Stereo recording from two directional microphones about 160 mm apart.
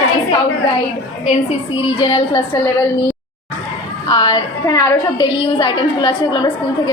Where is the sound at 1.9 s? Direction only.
30° left (ahead or behind).